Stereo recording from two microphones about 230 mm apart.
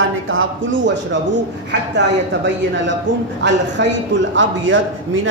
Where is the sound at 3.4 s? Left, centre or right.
Right.